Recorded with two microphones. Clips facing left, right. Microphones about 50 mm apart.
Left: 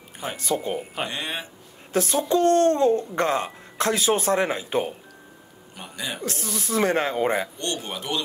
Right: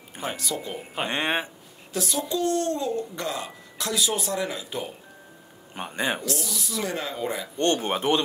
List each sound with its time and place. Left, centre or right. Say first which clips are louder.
0.4 s speech: left 6 dB; left
1.0 s speech: right 4 dB; right
1.9 s speech: left 6 dB; left
5.8 s a man's voice: right 5 dB; right
6.2 s speech: left 1 dB; left
7.5 s speech: right 7 dB; right